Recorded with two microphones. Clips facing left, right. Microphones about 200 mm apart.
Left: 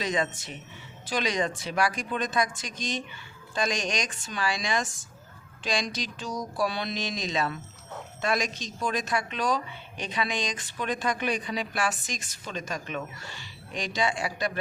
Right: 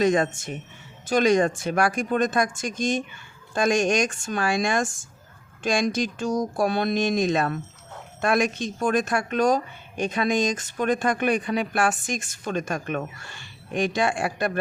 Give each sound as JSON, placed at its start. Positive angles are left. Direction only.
{"t": 0.0, "sound": "speech", "side_deg": -50}